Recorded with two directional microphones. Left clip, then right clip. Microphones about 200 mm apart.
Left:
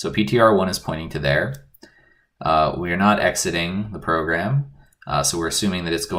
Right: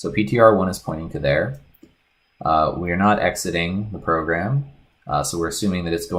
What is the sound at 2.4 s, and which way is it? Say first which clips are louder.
Speech: even; 35° right (ahead or behind).